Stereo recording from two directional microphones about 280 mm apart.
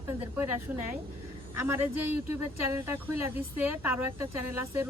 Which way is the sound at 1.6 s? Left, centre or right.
Centre.